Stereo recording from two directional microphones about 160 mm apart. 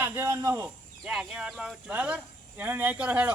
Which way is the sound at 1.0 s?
5° right (ahead or behind).